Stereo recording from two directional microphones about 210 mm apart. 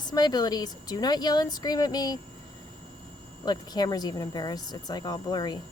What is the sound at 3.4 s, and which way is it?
Speech, 20° left (ahead or behind).